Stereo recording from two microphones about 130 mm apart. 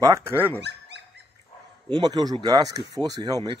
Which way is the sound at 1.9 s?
35° right (ahead or behind).